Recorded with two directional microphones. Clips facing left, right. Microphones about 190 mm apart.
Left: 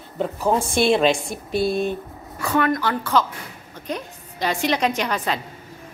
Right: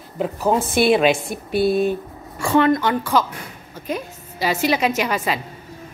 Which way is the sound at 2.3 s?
25° right (ahead or behind).